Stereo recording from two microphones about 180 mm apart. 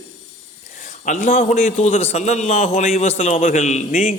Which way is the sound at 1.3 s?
50° left (ahead or behind).